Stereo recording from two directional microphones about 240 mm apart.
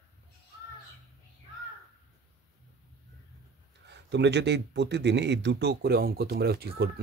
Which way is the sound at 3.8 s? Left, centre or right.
Right.